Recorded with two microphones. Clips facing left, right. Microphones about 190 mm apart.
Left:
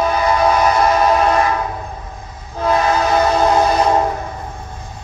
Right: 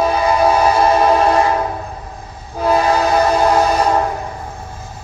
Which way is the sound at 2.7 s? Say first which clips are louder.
Right 1 dB; 30° right (ahead or behind).